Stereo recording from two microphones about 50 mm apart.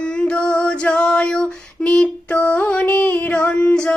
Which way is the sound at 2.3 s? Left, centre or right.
Left.